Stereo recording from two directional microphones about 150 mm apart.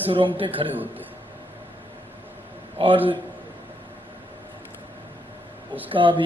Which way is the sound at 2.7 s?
35° right (ahead or behind).